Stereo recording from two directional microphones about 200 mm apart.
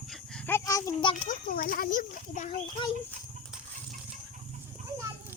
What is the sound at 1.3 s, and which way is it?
Speech, 45° left (ahead or behind).